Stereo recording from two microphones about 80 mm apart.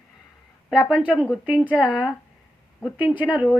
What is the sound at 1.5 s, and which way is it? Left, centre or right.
Speech, centre.